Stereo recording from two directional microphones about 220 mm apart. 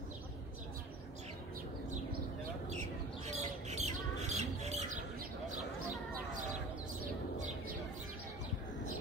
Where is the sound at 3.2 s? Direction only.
30° right (ahead or behind).